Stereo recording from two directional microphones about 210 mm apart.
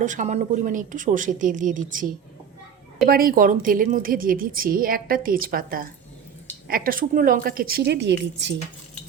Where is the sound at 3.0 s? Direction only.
45° right (ahead or behind).